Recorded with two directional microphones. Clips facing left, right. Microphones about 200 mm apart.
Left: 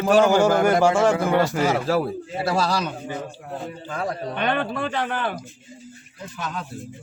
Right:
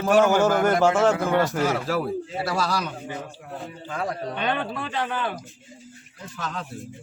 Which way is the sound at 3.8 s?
50° left (ahead or behind).